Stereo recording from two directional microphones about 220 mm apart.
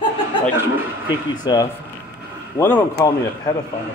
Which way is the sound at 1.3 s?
20° left (ahead or behind).